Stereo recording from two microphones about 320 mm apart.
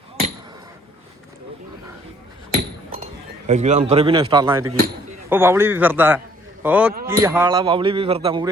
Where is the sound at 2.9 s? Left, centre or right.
Right.